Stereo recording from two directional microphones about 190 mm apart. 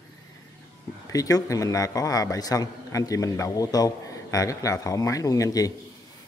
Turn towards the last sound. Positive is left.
turn(degrees=20)  # may be behind; listen again after turning